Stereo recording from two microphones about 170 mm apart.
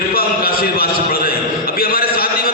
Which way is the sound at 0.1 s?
60° left (ahead or behind).